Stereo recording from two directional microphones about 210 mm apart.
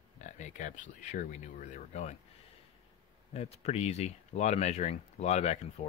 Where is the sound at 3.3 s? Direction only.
30° left (ahead or behind).